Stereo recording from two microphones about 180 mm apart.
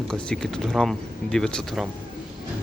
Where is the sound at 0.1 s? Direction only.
5° left (ahead or behind).